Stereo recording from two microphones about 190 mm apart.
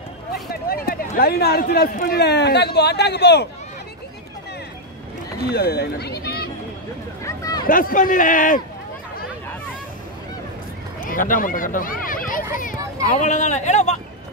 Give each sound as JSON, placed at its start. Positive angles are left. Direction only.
{"t": 0.3, "sound": "speech", "side_deg": 55}
{"t": 5.5, "sound": "speech", "side_deg": 60}
{"t": 7.2, "sound": "a sound", "side_deg": 20}
{"t": 7.6, "sound": "speech", "side_deg": 45}
{"t": 11.0, "sound": "speech", "side_deg": 45}